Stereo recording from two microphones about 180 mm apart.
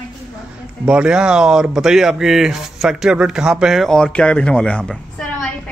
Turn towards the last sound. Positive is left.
turn(degrees=5)  # may be behind; listen again after turning